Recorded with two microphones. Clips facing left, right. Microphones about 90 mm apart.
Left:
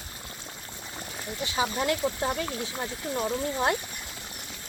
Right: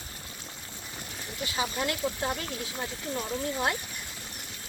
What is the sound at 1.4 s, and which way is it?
Speech, 25° left (ahead or behind).